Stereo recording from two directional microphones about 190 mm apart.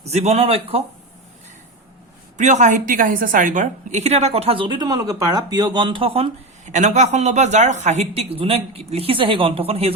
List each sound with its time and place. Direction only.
0.0 s a woman's voice: 35° right (ahead or behind)
2.4 s a woman's voice: 40° right (ahead or behind)